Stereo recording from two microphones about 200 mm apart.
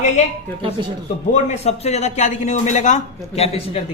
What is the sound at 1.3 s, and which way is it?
A man's voice, 35° left (ahead or behind).